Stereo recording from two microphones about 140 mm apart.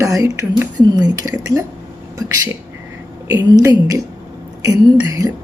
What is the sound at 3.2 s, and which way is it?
Speech, 25° right (ahead or behind).